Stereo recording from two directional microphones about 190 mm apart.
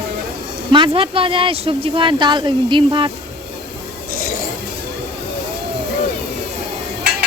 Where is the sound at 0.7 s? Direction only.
25° right (ahead or behind).